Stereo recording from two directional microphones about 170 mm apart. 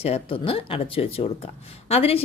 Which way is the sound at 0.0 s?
35° left (ahead or behind).